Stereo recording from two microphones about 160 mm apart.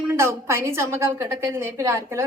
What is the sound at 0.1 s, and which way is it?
A woman's voice, 15° right (ahead or behind).